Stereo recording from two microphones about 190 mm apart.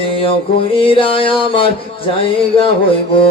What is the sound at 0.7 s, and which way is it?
Music, 25° left (ahead or behind).